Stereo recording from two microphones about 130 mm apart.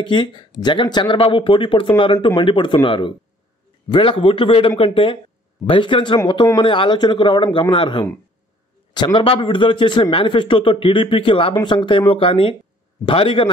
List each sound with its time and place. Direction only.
0.0 s a man's voice: 35° left (ahead or behind)